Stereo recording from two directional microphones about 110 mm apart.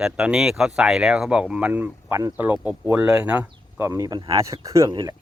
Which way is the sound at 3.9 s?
30° right (ahead or behind).